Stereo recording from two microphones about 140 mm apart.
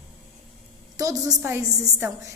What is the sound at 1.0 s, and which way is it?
Speech, 25° right (ahead or behind).